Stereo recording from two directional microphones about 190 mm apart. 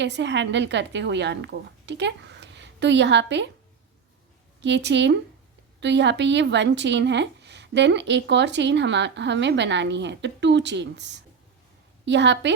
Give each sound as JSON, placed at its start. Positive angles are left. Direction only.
{"t": 0.0, "sound": "a woman's voice", "side_deg": -65}
{"t": 4.6, "sound": "speech", "side_deg": -65}